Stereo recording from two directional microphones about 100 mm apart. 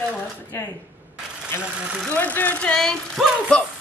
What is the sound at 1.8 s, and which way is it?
Speech, 10° right (ahead or behind).